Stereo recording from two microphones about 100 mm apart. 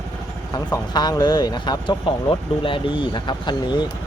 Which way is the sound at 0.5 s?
45° left (ahead or behind).